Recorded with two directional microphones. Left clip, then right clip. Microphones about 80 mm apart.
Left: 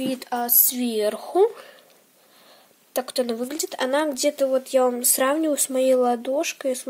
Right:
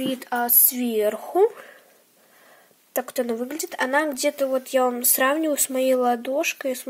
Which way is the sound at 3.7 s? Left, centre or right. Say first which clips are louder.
Right 1 dB; left.